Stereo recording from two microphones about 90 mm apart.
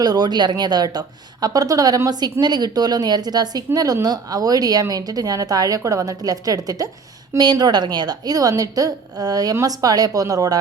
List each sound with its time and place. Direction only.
0.0 s a woman's voice: 50° right (ahead or behind)